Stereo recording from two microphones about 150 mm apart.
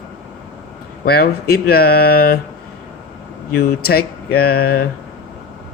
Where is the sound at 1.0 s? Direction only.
90° left.